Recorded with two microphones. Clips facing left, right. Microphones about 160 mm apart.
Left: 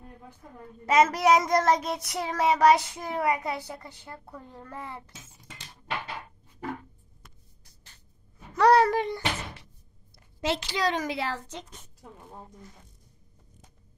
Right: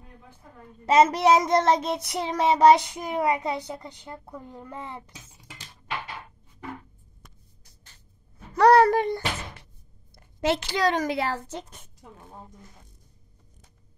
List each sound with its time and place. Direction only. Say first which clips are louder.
0.8 s child singing: right 3 dB; 30° right (ahead or behind)
8.5 s a sound: right 3 dB; 50° right (ahead or behind)
10.1 s a woman's voice: right 4 dB; 55° right (ahead or behind)
12.0 s a woman's voice: even; centre (ahead or behind)